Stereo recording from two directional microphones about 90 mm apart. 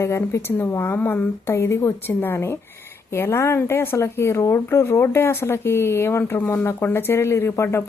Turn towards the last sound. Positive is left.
turn(degrees=30)  # may be behind; listen again after turning